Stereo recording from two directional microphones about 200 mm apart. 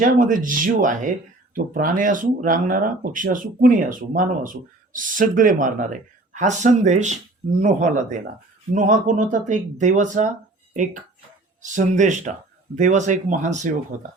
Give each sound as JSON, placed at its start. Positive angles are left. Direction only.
{"t": 0.0, "sound": "speech", "side_deg": -40}
{"t": 11.6, "sound": "speech", "side_deg": -35}